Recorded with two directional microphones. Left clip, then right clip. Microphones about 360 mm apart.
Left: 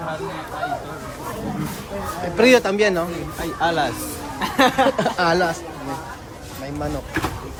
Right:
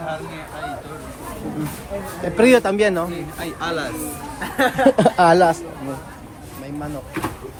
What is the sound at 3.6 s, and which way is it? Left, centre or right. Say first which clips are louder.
Speech: left 5 dB; centre.